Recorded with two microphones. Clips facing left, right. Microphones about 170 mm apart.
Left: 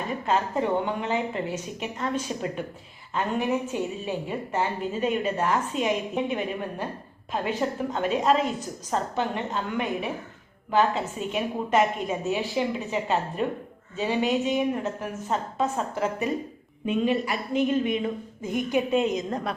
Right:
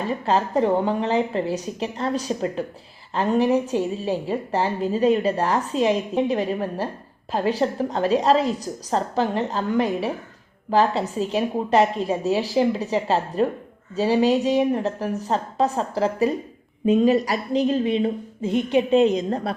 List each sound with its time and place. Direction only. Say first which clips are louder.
0.1 s a woman's voice: right 4 dB; 35° right (ahead or behind)